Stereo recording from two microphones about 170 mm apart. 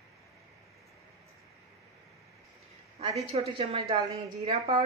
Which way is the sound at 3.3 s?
35° right (ahead or behind).